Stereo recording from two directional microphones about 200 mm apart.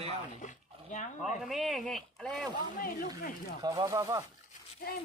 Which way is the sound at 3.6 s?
20° right (ahead or behind).